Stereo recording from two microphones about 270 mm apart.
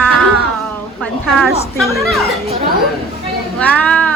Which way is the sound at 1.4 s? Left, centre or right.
Centre.